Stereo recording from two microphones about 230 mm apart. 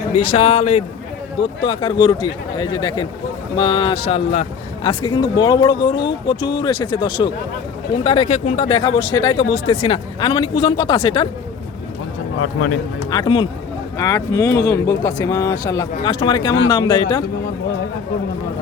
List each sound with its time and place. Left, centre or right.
0.3 s speech: left
12.4 s speech: left
13.1 s speech: centre